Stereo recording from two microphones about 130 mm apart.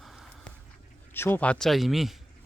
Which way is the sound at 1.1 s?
15° left (ahead or behind).